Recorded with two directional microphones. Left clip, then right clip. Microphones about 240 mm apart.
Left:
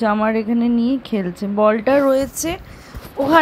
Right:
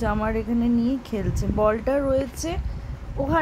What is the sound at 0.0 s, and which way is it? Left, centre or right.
A woman's voice, centre.